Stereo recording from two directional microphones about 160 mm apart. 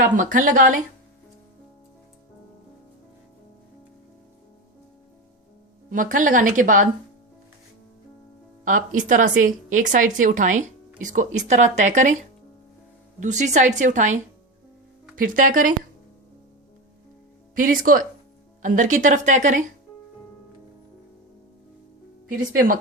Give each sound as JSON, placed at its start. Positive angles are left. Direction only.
{"t": 0.2, "sound": "a woman's voice", "side_deg": -55}
{"t": 5.9, "sound": "a woman's voice", "side_deg": -55}
{"t": 8.6, "sound": "a woman's voice", "side_deg": -55}
{"t": 13.1, "sound": "speech", "side_deg": -50}
{"t": 17.5, "sound": "a woman's voice", "side_deg": -60}
{"t": 22.5, "sound": "a woman's voice", "side_deg": -60}